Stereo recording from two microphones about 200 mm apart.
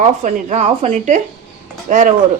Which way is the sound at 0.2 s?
35° right (ahead or behind).